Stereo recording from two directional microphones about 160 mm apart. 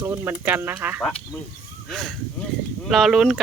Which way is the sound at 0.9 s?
Centre (ahead or behind).